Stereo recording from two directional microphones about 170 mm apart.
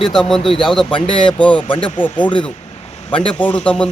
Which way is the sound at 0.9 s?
30° left (ahead or behind).